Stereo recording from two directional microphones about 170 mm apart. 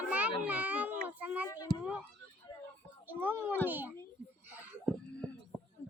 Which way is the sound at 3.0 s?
10° right (ahead or behind).